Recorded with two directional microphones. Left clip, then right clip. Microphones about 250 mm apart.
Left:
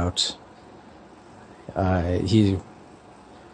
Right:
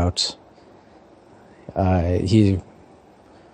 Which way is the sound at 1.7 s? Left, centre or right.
Centre.